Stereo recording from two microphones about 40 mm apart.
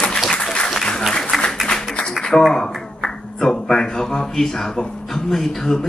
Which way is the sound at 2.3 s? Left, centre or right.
Left.